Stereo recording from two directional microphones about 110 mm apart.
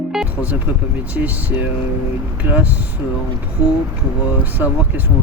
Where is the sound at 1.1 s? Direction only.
15° right (ahead or behind).